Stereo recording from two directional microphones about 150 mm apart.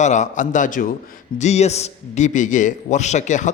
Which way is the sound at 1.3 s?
50° left (ahead or behind).